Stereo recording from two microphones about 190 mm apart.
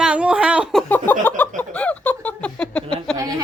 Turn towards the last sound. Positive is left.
turn(degrees=-20)  # may be behind; listen again after turning